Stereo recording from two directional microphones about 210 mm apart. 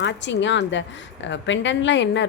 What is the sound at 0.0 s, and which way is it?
A woman's voice, 55° left (ahead or behind).